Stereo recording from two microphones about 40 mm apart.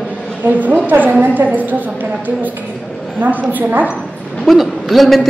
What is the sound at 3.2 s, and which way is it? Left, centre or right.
Speech, right.